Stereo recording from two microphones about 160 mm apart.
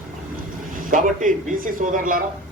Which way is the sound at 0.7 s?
60° right (ahead or behind).